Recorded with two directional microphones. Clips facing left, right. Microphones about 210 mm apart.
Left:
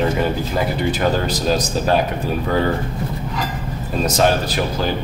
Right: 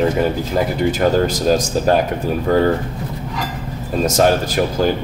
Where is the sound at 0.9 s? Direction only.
45° right (ahead or behind).